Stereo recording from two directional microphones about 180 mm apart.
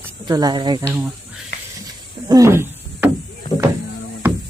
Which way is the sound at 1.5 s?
75° left (ahead or behind).